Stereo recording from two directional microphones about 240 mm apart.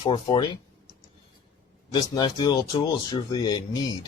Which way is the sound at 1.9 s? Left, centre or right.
Centre.